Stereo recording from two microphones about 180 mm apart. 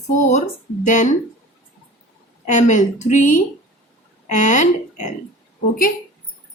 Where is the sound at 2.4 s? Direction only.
40° left (ahead or behind).